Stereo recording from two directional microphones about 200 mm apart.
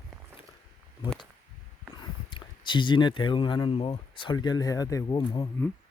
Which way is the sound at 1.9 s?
25° left (ahead or behind).